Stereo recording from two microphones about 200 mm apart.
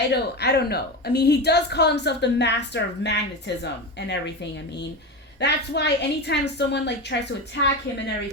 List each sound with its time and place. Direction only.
0.1 s a woman's voice: 55° left (ahead or behind)
5.4 s a woman's voice: 55° left (ahead or behind)